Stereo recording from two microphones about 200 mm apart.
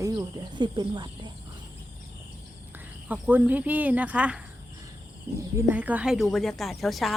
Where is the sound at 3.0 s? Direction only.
10° right (ahead or behind).